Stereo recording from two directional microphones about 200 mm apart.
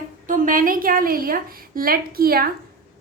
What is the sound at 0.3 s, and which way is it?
A woman's voice, 40° right (ahead or behind).